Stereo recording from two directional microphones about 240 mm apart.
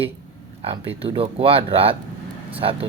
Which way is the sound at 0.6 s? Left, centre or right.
Right.